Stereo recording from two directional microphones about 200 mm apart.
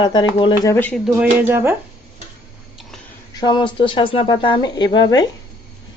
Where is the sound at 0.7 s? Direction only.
10° left (ahead or behind).